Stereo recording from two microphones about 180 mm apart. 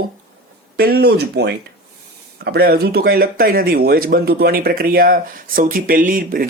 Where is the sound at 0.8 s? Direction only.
60° right (ahead or behind).